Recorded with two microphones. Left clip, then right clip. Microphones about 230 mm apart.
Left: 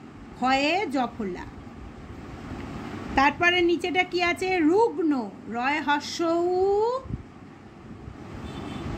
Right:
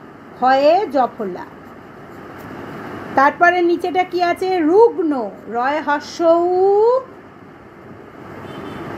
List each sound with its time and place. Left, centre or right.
0.4 s a woman's voice: left
3.2 s a woman's voice: left